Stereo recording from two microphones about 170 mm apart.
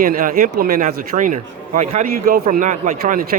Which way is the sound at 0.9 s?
45° right (ahead or behind).